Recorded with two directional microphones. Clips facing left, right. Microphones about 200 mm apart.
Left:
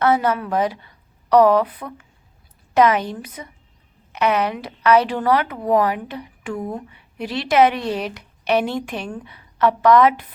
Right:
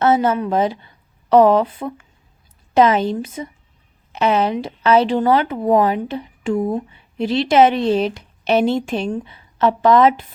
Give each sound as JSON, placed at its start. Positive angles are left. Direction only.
{"t": 0.0, "sound": "a woman's voice", "side_deg": -25}